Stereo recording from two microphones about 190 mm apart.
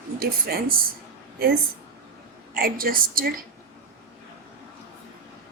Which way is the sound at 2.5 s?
50° right (ahead or behind).